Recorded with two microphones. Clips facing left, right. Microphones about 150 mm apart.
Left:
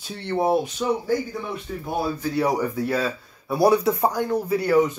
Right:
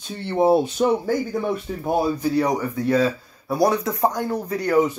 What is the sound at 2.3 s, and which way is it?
Speech, 5° left (ahead or behind).